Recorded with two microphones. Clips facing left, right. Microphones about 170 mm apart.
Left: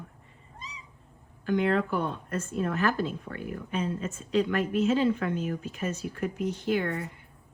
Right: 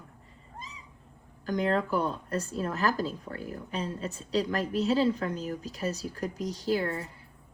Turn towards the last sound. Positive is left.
turn(degrees=-35)  # may be behind; listen again after turning